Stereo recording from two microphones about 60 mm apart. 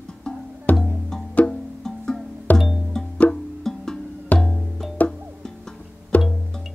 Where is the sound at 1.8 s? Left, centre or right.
Centre.